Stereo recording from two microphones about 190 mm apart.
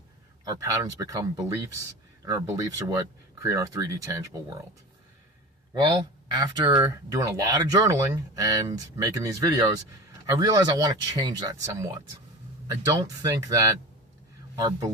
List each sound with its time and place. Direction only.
0.4 s speech: 15° right (ahead or behind)
5.7 s a man's voice: 25° right (ahead or behind)